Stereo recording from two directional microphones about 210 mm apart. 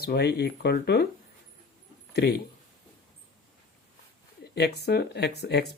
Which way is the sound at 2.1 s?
50° left (ahead or behind).